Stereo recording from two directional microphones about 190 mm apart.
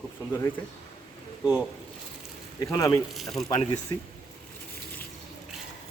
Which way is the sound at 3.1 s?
Centre (ahead or behind).